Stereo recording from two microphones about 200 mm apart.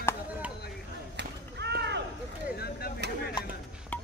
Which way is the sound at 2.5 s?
50° left (ahead or behind).